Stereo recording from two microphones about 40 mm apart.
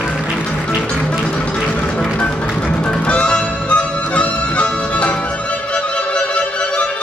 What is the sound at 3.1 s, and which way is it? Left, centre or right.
Music, left.